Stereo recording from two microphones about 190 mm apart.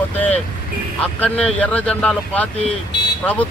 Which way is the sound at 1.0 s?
5° left (ahead or behind).